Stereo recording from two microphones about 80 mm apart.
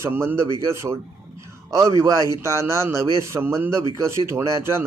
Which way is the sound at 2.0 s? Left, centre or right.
Right.